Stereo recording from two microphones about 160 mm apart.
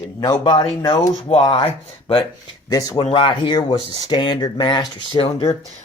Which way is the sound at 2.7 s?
20° left (ahead or behind).